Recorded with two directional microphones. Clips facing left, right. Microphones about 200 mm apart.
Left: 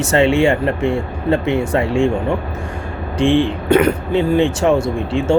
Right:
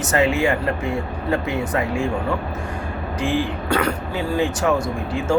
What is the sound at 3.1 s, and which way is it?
Speech, 25° left (ahead or behind).